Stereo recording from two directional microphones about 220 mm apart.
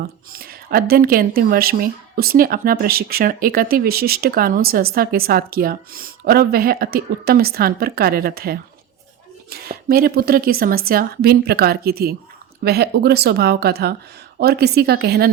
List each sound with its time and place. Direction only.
0.3 s speech: 45° right (ahead or behind)